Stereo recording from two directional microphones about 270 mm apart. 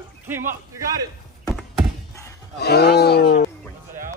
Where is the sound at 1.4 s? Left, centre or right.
Centre.